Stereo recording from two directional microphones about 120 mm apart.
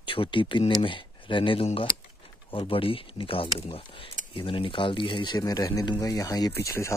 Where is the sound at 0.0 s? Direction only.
45° left (ahead or behind).